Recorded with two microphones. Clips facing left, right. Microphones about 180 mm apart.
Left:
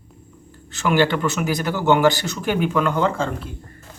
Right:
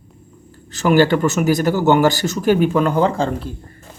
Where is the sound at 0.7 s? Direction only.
40° right (ahead or behind).